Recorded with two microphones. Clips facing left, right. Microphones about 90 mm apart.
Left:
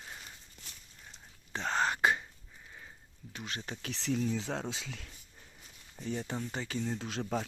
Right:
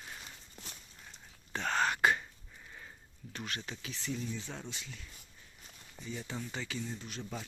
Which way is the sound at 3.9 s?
85° left.